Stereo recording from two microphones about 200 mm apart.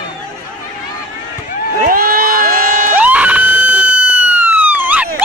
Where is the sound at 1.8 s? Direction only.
45° right (ahead or behind).